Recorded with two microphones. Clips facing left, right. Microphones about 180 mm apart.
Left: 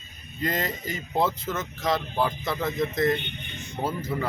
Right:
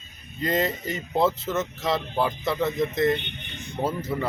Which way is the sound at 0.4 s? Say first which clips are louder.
Right 4 dB; 25° right (ahead or behind).